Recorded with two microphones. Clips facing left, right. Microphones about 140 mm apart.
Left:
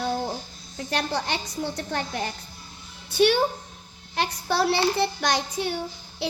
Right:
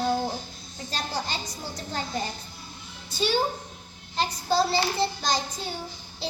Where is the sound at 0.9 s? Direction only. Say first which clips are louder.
Left 5 dB; 65° left (ahead or behind).